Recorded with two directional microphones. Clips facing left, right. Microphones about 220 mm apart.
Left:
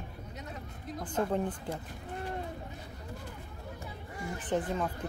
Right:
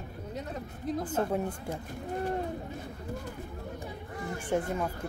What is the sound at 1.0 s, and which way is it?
Speech, 5° right (ahead or behind).